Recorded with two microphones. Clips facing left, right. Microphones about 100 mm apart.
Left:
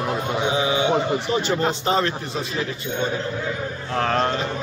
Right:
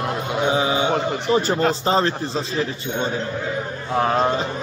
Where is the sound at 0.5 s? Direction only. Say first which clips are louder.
Even; 35° right (ahead or behind).